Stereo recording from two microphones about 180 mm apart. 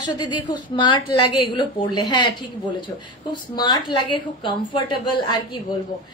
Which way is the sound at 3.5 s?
25° left (ahead or behind).